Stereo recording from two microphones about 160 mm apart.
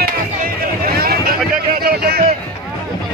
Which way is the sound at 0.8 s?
70° right (ahead or behind).